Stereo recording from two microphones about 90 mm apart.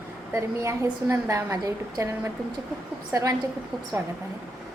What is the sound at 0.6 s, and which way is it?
A woman's voice, 30° right (ahead or behind).